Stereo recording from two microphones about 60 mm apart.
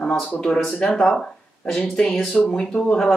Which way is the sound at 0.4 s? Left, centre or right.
Centre.